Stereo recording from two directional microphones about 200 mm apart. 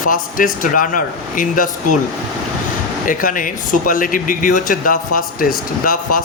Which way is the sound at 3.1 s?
40° left (ahead or behind).